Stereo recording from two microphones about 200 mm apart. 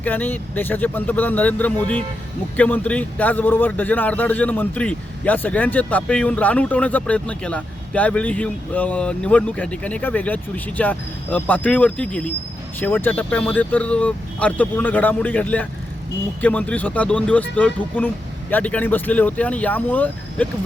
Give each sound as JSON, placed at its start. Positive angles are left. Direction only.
{"t": 0.0, "sound": "speech", "side_deg": 10}